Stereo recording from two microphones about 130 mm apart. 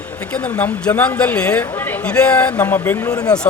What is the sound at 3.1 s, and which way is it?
Speech, 30° left (ahead or behind).